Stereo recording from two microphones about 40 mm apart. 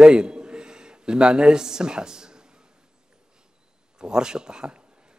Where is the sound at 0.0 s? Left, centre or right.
Right.